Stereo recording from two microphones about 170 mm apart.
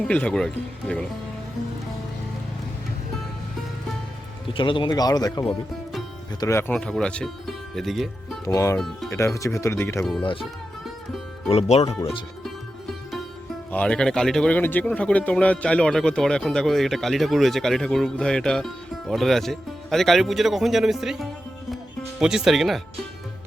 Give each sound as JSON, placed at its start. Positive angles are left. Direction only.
{"t": 0.1, "sound": "speech", "side_deg": 5}
{"t": 4.4, "sound": "speech", "side_deg": 30}
{"t": 6.4, "sound": "speech", "side_deg": 15}
{"t": 8.4, "sound": "speech", "side_deg": 20}
{"t": 10.0, "sound": "speech", "side_deg": 5}
{"t": 11.4, "sound": "speech", "side_deg": 40}
{"t": 13.7, "sound": "speech", "side_deg": 5}